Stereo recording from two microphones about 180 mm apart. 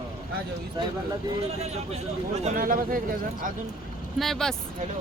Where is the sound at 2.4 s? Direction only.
50° right (ahead or behind).